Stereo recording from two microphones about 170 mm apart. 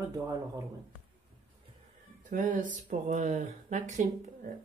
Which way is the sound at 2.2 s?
50° right (ahead or behind).